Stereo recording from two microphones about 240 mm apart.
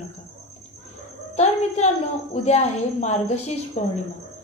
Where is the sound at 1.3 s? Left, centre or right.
Left.